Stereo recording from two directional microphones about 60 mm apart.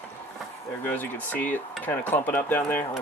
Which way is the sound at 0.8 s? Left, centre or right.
Left.